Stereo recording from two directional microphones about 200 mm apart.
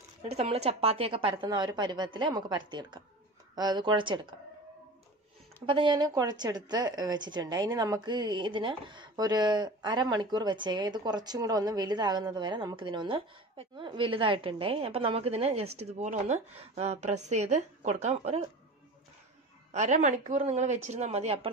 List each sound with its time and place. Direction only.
0.2 s a woman's voice: 30° right (ahead or behind)
5.7 s a woman's voice: 25° right (ahead or behind)
19.7 s a woman's voice: 35° right (ahead or behind)